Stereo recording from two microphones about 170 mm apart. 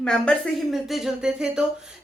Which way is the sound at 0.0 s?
5° left (ahead or behind).